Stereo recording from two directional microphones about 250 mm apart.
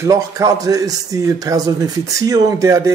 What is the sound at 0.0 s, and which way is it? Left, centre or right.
A man's voice, centre.